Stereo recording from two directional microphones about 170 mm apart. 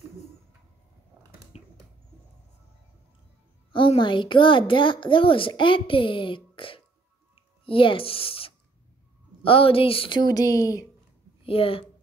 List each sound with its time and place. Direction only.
3.7 s a woman's voice: 30° left (ahead or behind)
11.4 s speech: 35° left (ahead or behind)